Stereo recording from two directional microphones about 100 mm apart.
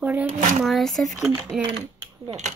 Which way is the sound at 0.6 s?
Centre (ahead or behind).